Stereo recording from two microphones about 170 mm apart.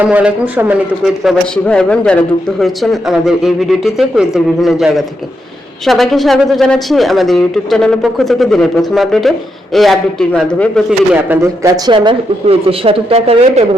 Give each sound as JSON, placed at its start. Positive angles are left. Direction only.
{"t": 0.0, "sound": "a woman's voice", "side_deg": -10}
{"t": 11.1, "sound": "speech", "side_deg": -15}
{"t": 11.9, "sound": "a woman's voice", "side_deg": -35}